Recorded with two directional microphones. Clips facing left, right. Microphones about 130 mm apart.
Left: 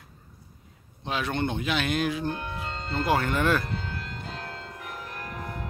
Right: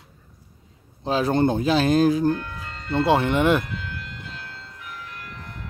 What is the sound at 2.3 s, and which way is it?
Music, 20° left (ahead or behind).